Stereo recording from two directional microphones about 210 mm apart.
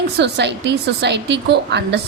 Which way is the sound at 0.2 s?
55° right (ahead or behind).